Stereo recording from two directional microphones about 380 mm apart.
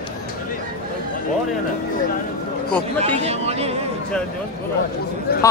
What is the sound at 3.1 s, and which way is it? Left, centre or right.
Speech, centre.